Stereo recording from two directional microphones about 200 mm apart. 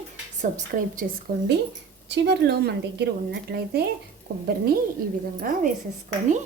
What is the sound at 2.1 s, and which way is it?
A woman's voice, 55° right (ahead or behind).